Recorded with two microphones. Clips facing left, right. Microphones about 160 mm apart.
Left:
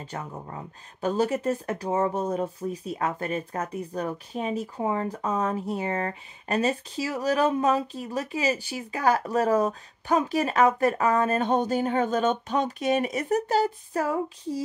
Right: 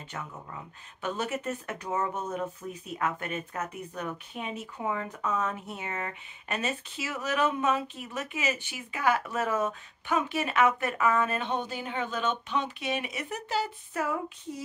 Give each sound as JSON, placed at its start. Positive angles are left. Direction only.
{"t": 0.0, "sound": "speech", "side_deg": 35}